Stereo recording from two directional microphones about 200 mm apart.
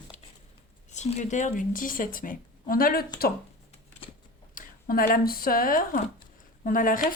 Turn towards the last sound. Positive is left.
turn(degrees=45)  # may be behind; listen again after turning